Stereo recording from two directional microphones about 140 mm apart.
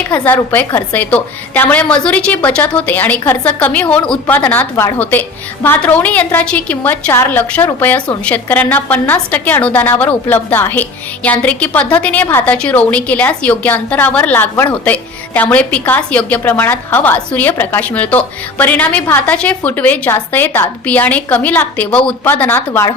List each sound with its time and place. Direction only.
0.3 s a woman's voice: 15° left (ahead or behind)